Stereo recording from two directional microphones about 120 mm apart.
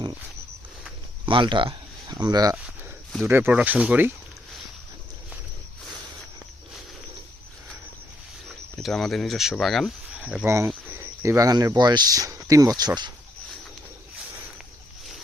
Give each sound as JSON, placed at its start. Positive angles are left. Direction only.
{"t": 1.2, "sound": "speech", "side_deg": -40}
{"t": 3.2, "sound": "speech", "side_deg": -20}
{"t": 8.4, "sound": "speech", "side_deg": 0}
{"t": 10.2, "sound": "cricket", "side_deg": -10}
{"t": 10.4, "sound": "speech", "side_deg": -20}